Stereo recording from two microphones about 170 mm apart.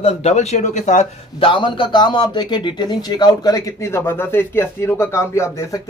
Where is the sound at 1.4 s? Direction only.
30° left (ahead or behind).